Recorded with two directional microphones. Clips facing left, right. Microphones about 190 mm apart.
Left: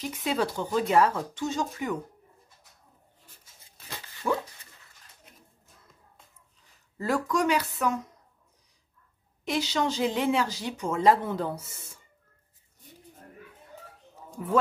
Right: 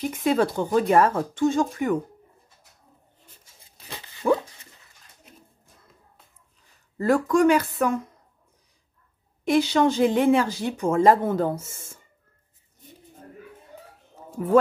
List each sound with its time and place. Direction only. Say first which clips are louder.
0.0 s speech: right 6 dB; 50° right (ahead or behind)
4.2 s dog: right 7 dB; 55° right (ahead or behind)
7.0 s speech: right 7 dB; 50° right (ahead or behind)
9.4 s speech: right 8 dB; 55° right (ahead or behind)
14.4 s speech: right 7 dB; 50° right (ahead or behind)